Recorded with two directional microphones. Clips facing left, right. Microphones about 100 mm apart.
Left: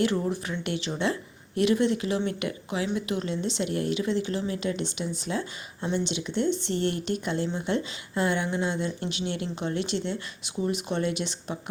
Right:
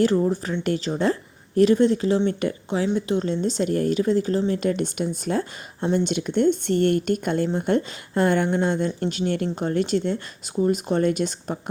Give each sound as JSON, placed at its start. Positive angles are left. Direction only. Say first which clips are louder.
{"t": 0.0, "sound": "speech", "louder": "right 6 dB", "side_deg": -30}